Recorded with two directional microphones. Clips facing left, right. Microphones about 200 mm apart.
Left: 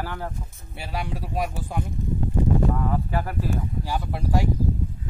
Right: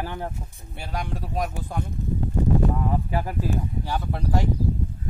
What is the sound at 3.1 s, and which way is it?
Speech, 15° right (ahead or behind).